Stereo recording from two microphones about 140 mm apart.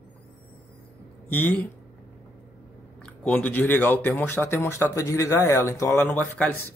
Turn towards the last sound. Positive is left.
turn(degrees=10)  # may be behind; listen again after turning